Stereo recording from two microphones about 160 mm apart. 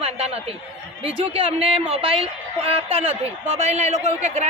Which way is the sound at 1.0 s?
40° right (ahead or behind).